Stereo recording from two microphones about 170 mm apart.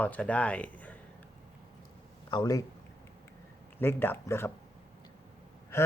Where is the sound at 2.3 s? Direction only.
25° left (ahead or behind).